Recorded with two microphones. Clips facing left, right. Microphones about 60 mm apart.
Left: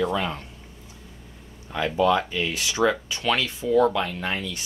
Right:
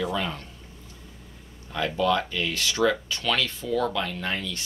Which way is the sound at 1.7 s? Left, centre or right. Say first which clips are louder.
Left 3 dB; centre.